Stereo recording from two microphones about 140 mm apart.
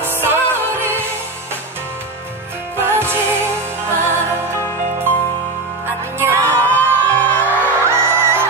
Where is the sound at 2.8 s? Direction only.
15° right (ahead or behind).